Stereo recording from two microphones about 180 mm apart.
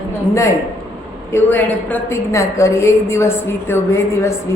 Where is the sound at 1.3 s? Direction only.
10° left (ahead or behind).